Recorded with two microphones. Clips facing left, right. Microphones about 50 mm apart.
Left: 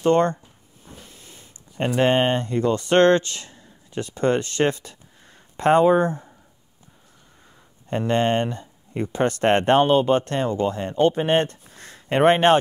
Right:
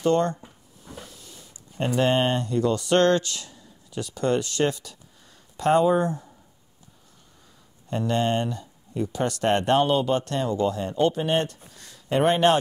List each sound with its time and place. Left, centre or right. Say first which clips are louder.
0.0 s speech: left 3 dB; left
7.9 s speech: left 3 dB; left